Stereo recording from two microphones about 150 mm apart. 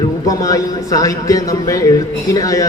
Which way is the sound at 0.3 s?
20° left (ahead or behind).